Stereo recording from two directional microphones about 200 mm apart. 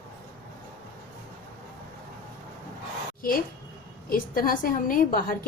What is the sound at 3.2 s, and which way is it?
A woman's voice, 45° left (ahead or behind).